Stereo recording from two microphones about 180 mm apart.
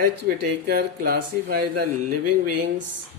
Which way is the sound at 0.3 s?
60° right (ahead or behind).